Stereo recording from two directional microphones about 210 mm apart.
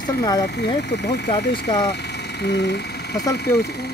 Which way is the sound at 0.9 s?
55° left (ahead or behind).